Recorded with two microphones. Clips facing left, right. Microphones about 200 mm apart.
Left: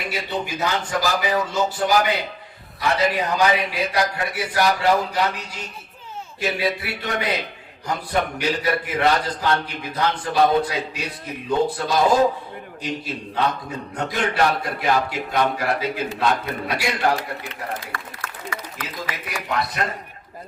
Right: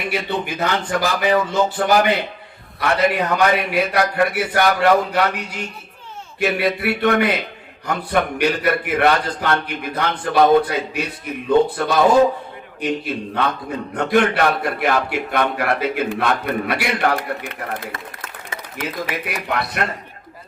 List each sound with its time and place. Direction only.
0.1 s a man's voice: 60° right (ahead or behind)
17.9 s a sound: 25° right (ahead or behind)
19.2 s a man's voice: 60° right (ahead or behind)